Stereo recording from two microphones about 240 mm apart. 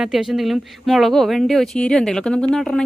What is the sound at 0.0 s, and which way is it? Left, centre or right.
Speech, centre.